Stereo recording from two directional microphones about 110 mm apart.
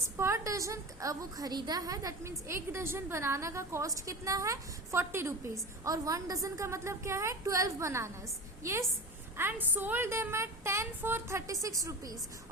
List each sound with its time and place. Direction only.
0.2 s a woman's voice: 25° right (ahead or behind)
9.4 s a woman's voice: 15° right (ahead or behind)